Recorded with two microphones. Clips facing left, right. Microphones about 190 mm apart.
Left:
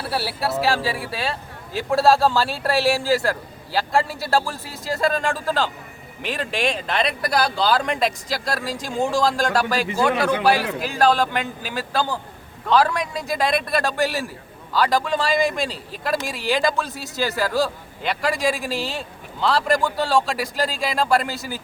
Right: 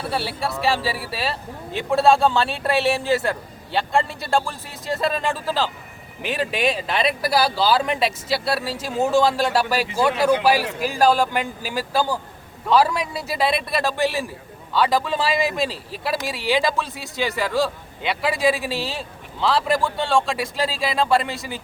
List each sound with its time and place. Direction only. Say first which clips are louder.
0.1 s a man's voice: left 4 dB; 5° left (ahead or behind)